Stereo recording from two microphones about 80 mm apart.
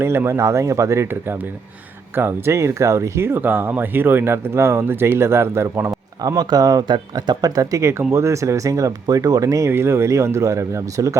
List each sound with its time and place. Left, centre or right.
0.0 s speech: right
6.8 s speech: right
7.4 s speech: right